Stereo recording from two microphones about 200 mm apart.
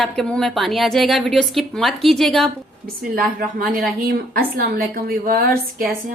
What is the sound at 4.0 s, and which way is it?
A woman's voice, 45° right (ahead or behind).